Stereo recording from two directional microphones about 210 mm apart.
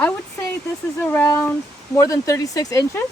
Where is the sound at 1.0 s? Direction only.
10° left (ahead or behind).